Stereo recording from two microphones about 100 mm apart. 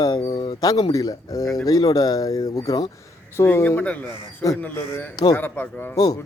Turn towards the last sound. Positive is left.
turn(degrees=40)  # may be behind; listen again after turning